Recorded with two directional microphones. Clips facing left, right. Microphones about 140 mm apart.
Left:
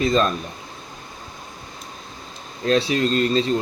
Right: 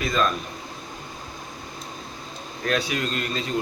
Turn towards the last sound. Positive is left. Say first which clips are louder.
# left 9 dB
turn(degrees=30)  # may be behind; listen again after turning